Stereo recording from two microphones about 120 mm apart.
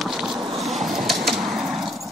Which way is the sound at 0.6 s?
Centre (ahead or behind).